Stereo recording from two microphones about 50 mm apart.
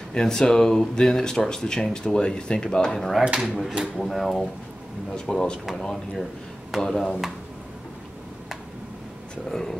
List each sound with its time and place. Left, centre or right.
0.1 s speech: centre
1.3 s speech: centre
1.6 s speech: centre
2.9 s speech: centre
9.5 s speech: centre